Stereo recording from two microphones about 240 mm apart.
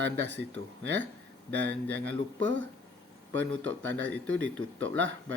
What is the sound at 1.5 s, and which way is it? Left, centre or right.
Speech, right.